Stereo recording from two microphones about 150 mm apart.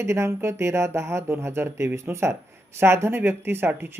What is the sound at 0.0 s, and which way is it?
Speech, 20° right (ahead or behind).